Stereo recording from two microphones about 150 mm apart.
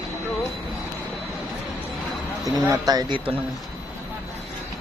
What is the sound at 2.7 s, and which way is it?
Speech, 25° right (ahead or behind).